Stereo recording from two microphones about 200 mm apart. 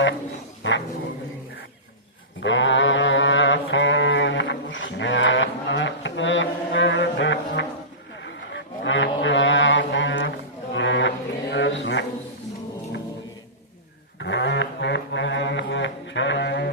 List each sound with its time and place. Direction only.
0.6 s speech: 70° left (ahead or behind)
2.4 s mantra: 65° left (ahead or behind)
8.2 s livestock: 60° left (ahead or behind)
14.2 s a sound: 60° left (ahead or behind)